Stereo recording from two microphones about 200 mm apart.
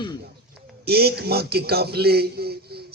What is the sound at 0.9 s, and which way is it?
A man's voice, 50° right (ahead or behind).